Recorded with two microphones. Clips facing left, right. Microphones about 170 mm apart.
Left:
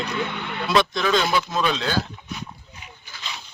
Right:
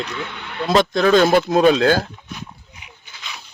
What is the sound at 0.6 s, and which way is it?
Speech, 45° right (ahead or behind).